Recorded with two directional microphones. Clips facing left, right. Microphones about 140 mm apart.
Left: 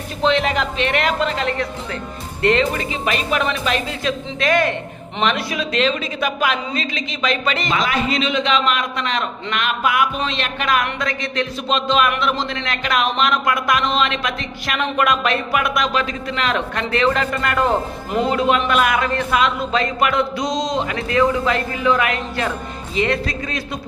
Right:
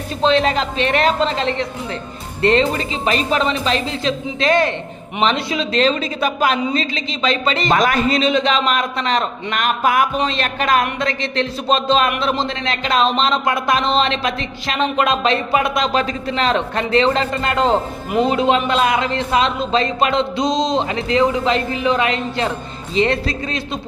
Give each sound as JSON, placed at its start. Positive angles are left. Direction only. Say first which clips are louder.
{"t": 0.2, "sound": "a man's voice", "louder": "right 2 dB", "side_deg": -35}
{"t": 7.7, "sound": "a man's voice", "louder": "right 6 dB", "side_deg": -45}